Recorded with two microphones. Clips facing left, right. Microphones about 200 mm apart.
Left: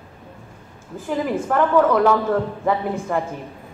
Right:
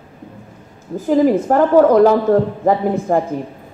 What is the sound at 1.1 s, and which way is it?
A woman's voice, 40° right (ahead or behind).